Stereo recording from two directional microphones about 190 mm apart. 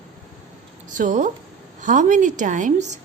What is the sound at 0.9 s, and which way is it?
A woman's voice, 40° right (ahead or behind).